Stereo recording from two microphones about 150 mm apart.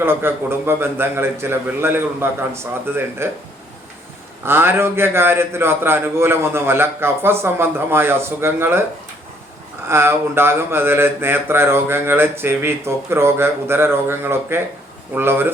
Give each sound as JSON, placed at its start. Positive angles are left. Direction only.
{"t": 0.0, "sound": "mantra", "side_deg": -15}
{"t": 4.4, "sound": "mantra", "side_deg": -15}
{"t": 9.9, "sound": "mantra", "side_deg": -15}